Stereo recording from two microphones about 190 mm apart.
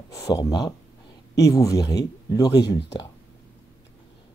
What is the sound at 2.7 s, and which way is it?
Speech, 65° left (ahead or behind).